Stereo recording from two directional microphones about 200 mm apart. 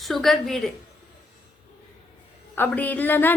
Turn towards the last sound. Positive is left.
turn(degrees=10)  # may be behind; listen again after turning